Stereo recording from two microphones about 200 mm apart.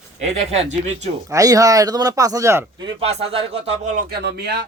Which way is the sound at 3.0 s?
30° right (ahead or behind).